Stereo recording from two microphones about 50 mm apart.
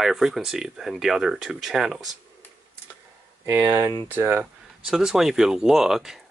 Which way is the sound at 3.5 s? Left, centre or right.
Right.